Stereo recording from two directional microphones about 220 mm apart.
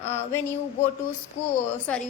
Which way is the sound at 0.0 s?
30° left (ahead or behind).